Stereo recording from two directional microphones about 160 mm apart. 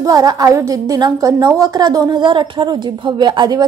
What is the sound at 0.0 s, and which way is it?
A woman's voice, 20° right (ahead or behind).